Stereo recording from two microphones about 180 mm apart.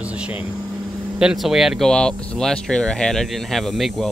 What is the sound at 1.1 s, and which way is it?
Speech, 5° right (ahead or behind).